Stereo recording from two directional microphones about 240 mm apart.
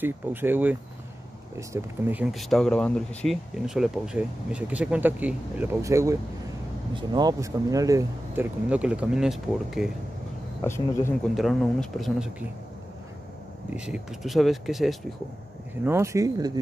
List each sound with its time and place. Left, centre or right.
0.0 s speech: centre
10.6 s speech: centre
11.3 s speech: centre
13.7 s speech: centre